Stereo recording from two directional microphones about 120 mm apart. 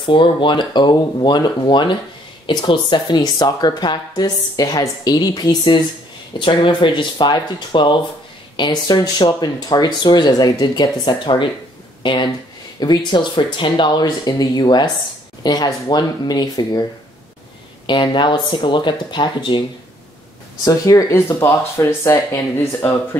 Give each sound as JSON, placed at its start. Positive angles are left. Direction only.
{"t": 0.0, "sound": "speech", "side_deg": 45}
{"t": 17.8, "sound": "speech", "side_deg": 40}
{"t": 20.6, "sound": "speech", "side_deg": 30}